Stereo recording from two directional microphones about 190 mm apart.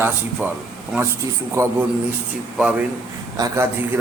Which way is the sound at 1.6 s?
15° right (ahead or behind).